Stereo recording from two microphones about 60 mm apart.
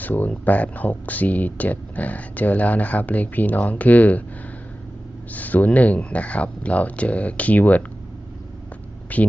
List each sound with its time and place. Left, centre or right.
0.0 s speech: left
5.3 s speech: left
9.1 s speech: left